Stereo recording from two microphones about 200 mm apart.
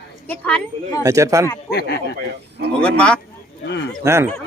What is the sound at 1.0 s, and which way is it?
Speech, 15° right (ahead or behind).